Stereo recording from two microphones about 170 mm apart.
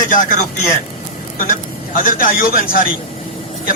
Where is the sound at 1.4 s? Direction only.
55° left (ahead or behind).